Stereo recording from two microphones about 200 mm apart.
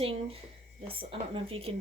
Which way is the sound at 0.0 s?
30° right (ahead or behind).